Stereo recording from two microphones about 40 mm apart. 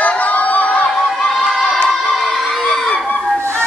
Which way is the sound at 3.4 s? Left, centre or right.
Right.